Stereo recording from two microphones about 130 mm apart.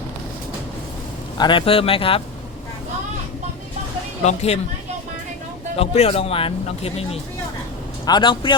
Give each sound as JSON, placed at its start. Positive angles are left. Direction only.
{"t": 1.4, "sound": "speech", "side_deg": 40}
{"t": 4.2, "sound": "speech", "side_deg": 60}
{"t": 5.7, "sound": "speech", "side_deg": 50}
{"t": 8.0, "sound": "a man's voice", "side_deg": 35}